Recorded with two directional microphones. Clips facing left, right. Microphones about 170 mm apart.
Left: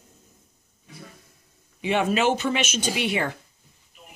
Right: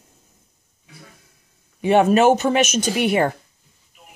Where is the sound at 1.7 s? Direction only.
45° right (ahead or behind).